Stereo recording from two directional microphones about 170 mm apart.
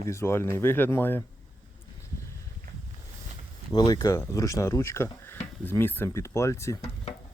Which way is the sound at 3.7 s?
25° left (ahead or behind).